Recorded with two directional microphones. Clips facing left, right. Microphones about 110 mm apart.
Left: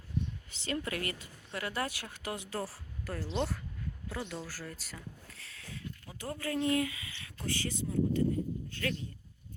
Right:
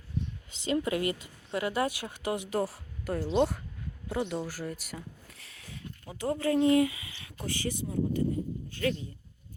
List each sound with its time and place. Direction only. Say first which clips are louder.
0.6 s speech: right 7 dB; 20° right (ahead or behind)